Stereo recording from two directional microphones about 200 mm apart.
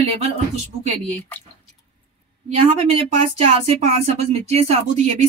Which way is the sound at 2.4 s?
35° right (ahead or behind).